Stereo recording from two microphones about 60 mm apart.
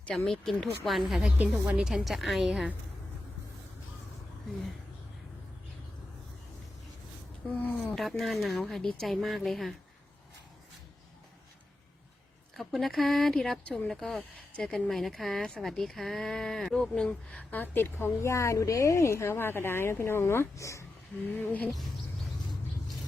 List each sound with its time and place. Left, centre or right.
0.0 s speech: centre
0.9 s speech: centre
1.6 s speech: centre
1.9 s speech: centre
7.6 s speech: left
7.9 s speech: centre
12.5 s speech: centre
15.4 s speech: centre
17.0 s speech: centre
17.5 s speech: left
20.6 s speech: left
21.2 s roaring cats: left